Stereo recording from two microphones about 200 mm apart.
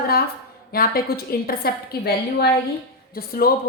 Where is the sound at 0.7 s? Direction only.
50° left (ahead or behind).